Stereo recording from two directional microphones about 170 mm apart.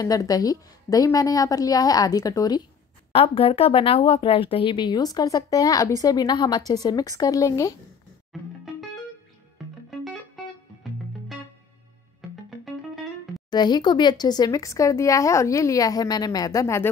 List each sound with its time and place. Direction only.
0.0 s speech: 20° left (ahead or behind)
3.1 s speech: 30° left (ahead or behind)
8.3 s music: centre (ahead or behind)
13.5 s speech: 25° left (ahead or behind)